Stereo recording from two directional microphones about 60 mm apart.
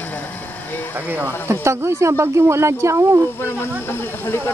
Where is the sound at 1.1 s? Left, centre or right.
Right.